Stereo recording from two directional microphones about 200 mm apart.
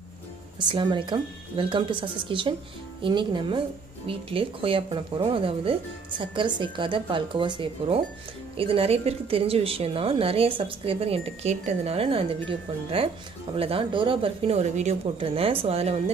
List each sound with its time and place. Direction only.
0.7 s a woman's voice: 25° right (ahead or behind)